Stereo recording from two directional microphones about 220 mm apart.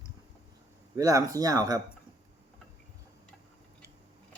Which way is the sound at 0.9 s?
15° right (ahead or behind).